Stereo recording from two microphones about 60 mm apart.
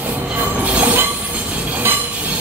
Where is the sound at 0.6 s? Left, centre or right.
Right.